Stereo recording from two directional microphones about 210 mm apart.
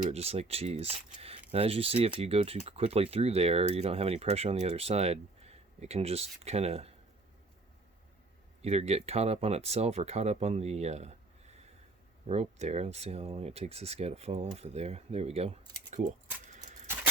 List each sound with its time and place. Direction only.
0.0 s speech: 30° right (ahead or behind)
8.6 s speech: 30° right (ahead or behind)